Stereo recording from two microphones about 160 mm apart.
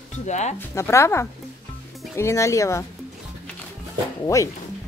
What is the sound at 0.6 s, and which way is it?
Speech, 15° left (ahead or behind).